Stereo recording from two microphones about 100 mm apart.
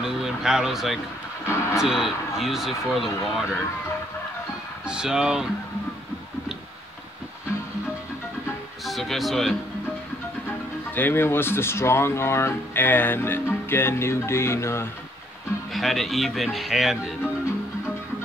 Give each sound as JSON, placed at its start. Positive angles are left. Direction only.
{"t": 0.0, "sound": "speech", "side_deg": -5}
{"t": 4.8, "sound": "speech", "side_deg": -5}
{"t": 8.8, "sound": "speech", "side_deg": 0}
{"t": 11.0, "sound": "speech", "side_deg": 20}
{"t": 15.7, "sound": "speech", "side_deg": 0}